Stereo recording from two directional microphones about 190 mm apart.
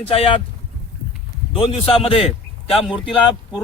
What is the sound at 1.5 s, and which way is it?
A man's voice, 30° left (ahead or behind).